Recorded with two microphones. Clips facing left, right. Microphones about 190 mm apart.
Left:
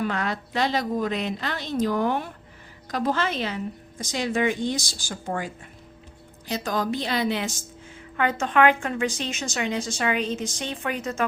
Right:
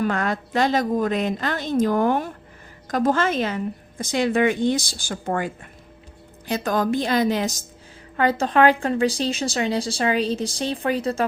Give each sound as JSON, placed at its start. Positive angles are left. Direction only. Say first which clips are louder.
{"t": 0.0, "sound": "a woman's voice", "louder": "right 4 dB", "side_deg": -50}
{"t": 6.5, "sound": "a woman's voice", "louder": "right 5 dB", "side_deg": -50}